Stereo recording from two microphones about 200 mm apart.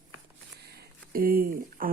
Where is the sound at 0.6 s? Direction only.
50° right (ahead or behind).